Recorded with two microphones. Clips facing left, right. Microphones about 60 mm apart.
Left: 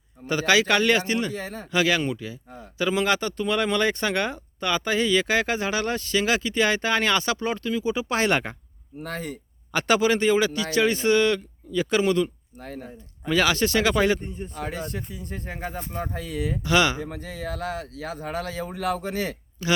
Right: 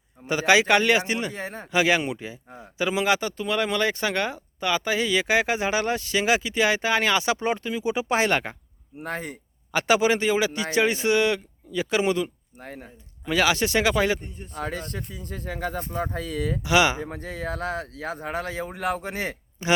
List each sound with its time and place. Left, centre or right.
0.3 s speech: centre
1.3 s speech: right
1.7 s speech: centre
7.3 s speech: centre
8.2 s speech: centre
9.0 s speech: right
9.7 s speech: centre
10.5 s speech: right
10.9 s speech: centre
14.3 s a man's voice: left
14.9 s speech: right
16.6 s speech: centre
17.0 s speech: right